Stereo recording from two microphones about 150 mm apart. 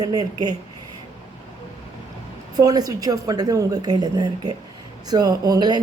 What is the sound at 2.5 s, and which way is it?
Speech, 25° right (ahead or behind).